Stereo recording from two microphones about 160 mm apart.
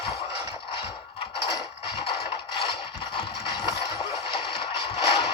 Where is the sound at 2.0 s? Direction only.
30° left (ahead or behind).